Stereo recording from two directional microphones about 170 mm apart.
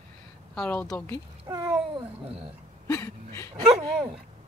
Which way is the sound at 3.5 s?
35° right (ahead or behind).